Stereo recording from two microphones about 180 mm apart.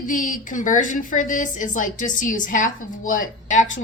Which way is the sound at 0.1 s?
50° left (ahead or behind).